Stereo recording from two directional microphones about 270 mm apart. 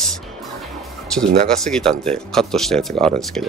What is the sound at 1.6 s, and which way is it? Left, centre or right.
Speech, centre.